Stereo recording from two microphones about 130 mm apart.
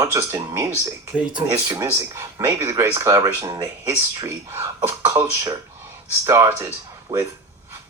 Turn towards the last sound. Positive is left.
turn(degrees=-30)  # may be behind; listen again after turning